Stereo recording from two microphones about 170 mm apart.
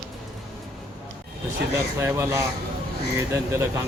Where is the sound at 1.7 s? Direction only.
15° right (ahead or behind).